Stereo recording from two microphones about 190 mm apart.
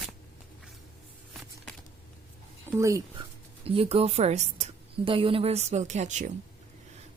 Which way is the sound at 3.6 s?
30° right (ahead or behind).